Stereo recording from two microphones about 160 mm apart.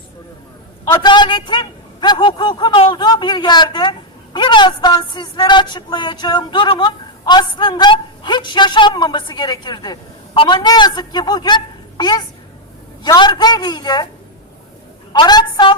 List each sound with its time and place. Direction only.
1.0 s a man's voice: 30° left (ahead or behind)
15.1 s a man's voice: 25° left (ahead or behind)